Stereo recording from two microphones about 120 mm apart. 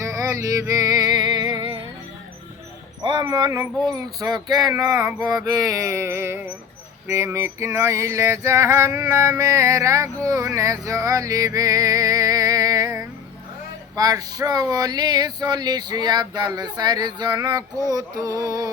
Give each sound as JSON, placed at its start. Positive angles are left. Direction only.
{"t": 0.0, "sound": "music", "side_deg": -30}
{"t": 3.0, "sound": "speech", "side_deg": -40}
{"t": 3.2, "sound": "a sound", "side_deg": -30}
{"t": 3.9, "sound": "speech", "side_deg": -35}
{"t": 5.2, "sound": "a sound", "side_deg": -35}
{"t": 13.9, "sound": "speech", "side_deg": -30}